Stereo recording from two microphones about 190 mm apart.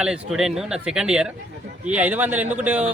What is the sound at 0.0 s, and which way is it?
A man's voice, 5° right (ahead or behind).